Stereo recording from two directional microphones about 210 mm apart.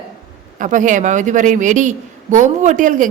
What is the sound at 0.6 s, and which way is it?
A man's voice, 40° right (ahead or behind).